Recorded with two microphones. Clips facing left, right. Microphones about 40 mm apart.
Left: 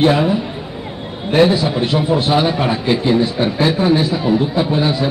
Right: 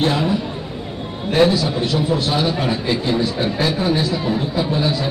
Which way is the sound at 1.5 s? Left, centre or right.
Left.